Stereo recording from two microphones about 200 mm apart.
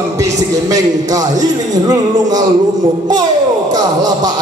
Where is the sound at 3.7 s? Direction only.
20° right (ahead or behind).